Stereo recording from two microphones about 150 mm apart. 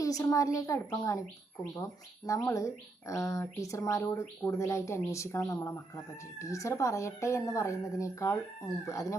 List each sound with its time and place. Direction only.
0.0 s speech: 25° left (ahead or behind)